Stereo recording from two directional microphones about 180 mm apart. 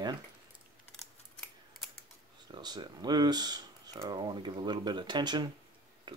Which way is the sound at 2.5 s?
25° right (ahead or behind).